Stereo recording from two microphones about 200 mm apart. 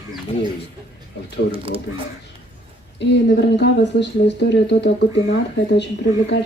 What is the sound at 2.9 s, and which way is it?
Speech, 60° left (ahead or behind).